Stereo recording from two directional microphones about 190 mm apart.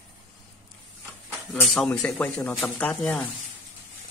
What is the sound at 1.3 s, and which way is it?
Speech, centre (ahead or behind).